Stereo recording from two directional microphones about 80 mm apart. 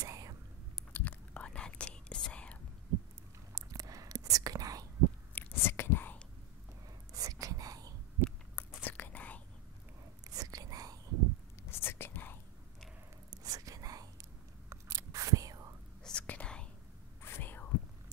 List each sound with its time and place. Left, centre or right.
0.0 s whispering: right
0.9 s whispering: centre
3.5 s whispering: right
5.3 s whispering: left
7.1 s whispering: right
8.5 s whispering: left
10.2 s whispering: right
11.7 s whispering: left
13.3 s a sound: right
16.0 s whispering: centre
17.2 s whispering: left